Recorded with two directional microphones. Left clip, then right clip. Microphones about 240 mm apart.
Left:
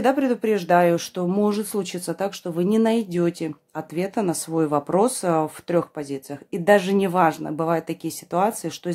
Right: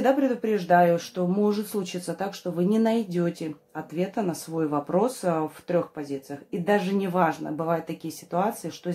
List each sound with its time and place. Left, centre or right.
0.0 s speech: left